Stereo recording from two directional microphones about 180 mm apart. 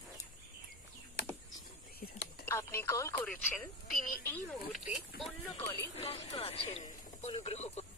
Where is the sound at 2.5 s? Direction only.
15° left (ahead or behind).